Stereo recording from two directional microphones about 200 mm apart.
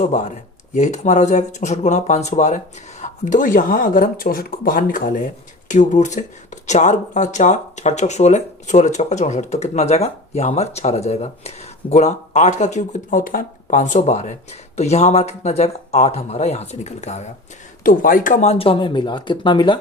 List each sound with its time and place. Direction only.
0.0 s speech: 35° left (ahead or behind)